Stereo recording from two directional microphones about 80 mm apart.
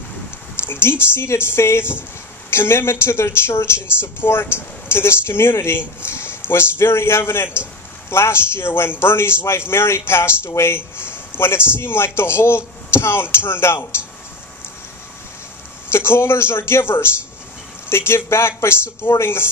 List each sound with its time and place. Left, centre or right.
0.6 s a man's voice: left
15.9 s a man's voice: left